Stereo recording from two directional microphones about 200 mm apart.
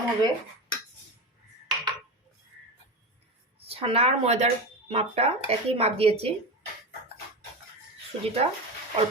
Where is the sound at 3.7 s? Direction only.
30° right (ahead or behind).